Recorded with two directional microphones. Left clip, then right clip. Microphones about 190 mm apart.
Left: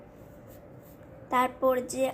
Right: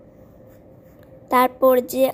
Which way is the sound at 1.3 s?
30° right (ahead or behind).